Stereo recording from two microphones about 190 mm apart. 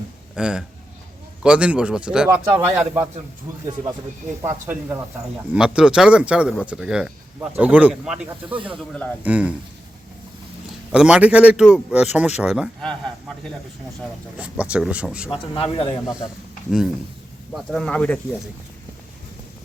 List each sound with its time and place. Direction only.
0.3 s speech: 5° right (ahead or behind)
4.4 s speech: 10° right (ahead or behind)
8.4 s speech: 25° right (ahead or behind)
9.2 s speech: 5° right (ahead or behind)
10.9 s speech: 5° right (ahead or behind)
14.3 s speech: 5° right (ahead or behind)
15.5 s speech: 30° left (ahead or behind)
17.5 s speech: centre (ahead or behind)